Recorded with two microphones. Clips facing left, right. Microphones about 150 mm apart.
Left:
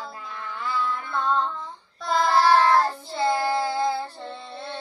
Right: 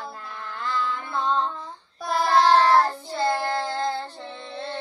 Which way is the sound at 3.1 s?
5° left (ahead or behind).